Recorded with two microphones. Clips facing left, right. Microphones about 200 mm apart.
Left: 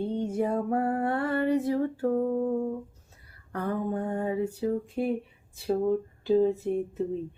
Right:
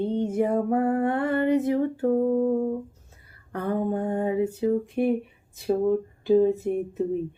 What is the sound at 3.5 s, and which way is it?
Music, 25° right (ahead or behind).